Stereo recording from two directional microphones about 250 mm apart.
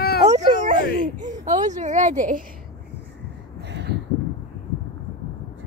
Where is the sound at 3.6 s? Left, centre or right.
Right.